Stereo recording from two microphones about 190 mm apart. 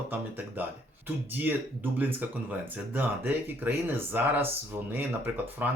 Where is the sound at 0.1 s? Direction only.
10° right (ahead or behind).